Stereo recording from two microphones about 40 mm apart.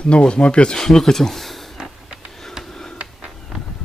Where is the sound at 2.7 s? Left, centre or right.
Centre.